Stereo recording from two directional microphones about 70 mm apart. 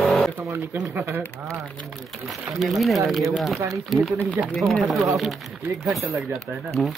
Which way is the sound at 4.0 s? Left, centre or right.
Right.